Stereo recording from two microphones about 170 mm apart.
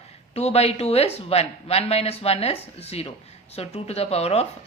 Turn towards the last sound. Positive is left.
turn(degrees=35)  # may be behind; listen again after turning